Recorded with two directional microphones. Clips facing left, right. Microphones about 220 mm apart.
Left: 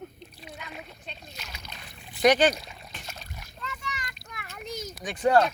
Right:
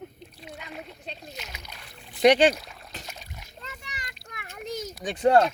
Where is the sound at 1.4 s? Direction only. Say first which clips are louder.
Right 2 dB; 20° right (ahead or behind).